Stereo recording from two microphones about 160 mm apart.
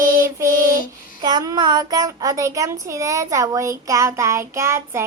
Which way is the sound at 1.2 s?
25° right (ahead or behind).